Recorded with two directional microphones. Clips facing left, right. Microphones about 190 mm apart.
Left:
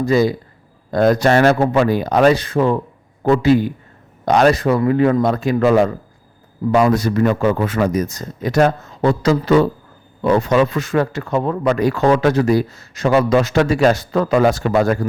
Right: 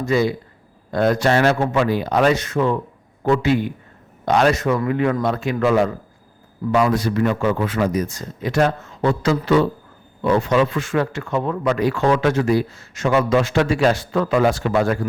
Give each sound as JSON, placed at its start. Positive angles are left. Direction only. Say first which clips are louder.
{"t": 0.0, "sound": "a man's voice", "louder": "left 4 dB", "side_deg": 40}